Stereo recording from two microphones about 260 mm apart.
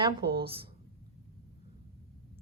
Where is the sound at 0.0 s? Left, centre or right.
Centre.